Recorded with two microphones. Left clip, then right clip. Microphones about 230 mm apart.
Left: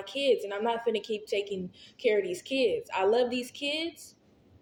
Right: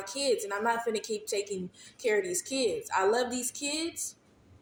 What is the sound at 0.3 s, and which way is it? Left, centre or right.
A woman's voice, centre.